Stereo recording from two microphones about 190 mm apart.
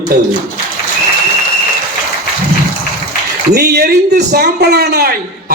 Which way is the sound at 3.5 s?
55° right (ahead or behind).